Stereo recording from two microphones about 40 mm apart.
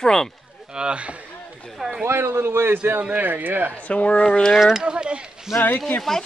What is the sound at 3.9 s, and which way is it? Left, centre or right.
Speech, left.